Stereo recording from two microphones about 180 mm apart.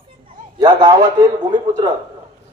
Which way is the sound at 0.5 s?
25° right (ahead or behind).